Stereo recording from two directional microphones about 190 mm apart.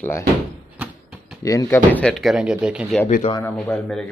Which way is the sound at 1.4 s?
15° left (ahead or behind).